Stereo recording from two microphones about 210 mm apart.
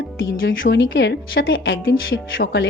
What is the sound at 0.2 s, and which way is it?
A woman's voice, 65° left (ahead or behind).